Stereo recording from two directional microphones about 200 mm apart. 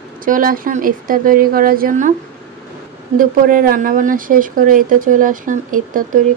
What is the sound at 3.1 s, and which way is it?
Speech, 45° right (ahead or behind).